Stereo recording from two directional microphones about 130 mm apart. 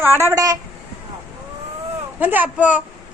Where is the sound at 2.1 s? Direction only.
15° right (ahead or behind).